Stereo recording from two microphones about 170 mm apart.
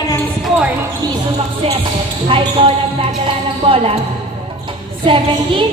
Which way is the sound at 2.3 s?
30° right (ahead or behind).